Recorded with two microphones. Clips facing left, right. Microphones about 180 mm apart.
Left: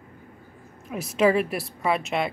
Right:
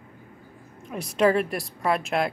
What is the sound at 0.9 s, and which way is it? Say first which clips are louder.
A woman's voice: even; 5° left (ahead or behind).